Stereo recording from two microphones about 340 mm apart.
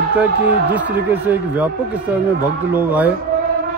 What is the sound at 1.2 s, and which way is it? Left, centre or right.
Speech, centre.